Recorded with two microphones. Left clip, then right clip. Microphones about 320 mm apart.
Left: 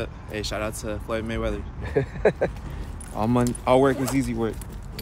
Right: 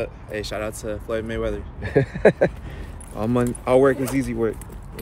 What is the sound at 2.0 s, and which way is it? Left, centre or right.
Speech, right.